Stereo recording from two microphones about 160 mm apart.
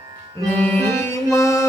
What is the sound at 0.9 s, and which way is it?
Music, 15° left (ahead or behind).